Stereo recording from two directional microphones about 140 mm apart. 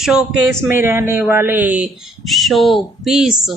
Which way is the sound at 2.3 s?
Centre (ahead or behind).